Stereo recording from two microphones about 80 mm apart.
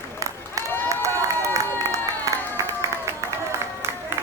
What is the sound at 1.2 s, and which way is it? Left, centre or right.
Crowd, right.